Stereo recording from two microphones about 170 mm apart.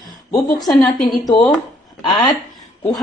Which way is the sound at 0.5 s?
Centre (ahead or behind).